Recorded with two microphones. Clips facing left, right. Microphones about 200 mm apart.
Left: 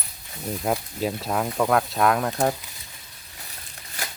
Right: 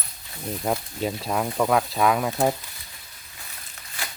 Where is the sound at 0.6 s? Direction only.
Centre (ahead or behind).